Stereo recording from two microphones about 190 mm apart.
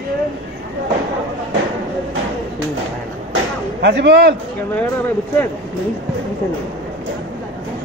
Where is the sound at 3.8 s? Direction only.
65° right (ahead or behind).